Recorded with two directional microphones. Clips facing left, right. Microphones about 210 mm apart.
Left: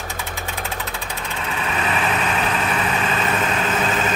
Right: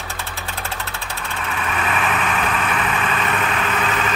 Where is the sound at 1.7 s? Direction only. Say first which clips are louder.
Even; 25° left (ahead or behind).